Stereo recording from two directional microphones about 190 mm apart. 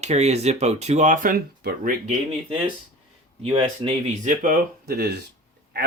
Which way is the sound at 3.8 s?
40° right (ahead or behind).